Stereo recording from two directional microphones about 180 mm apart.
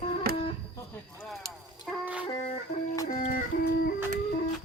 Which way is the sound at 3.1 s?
50° left (ahead or behind).